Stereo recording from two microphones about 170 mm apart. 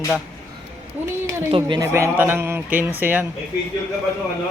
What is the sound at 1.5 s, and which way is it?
Speech, 30° right (ahead or behind).